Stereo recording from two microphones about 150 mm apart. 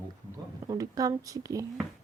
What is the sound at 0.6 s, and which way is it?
Speech, 25° right (ahead or behind).